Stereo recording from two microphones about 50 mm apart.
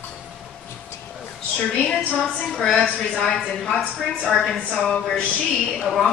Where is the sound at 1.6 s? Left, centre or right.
Centre.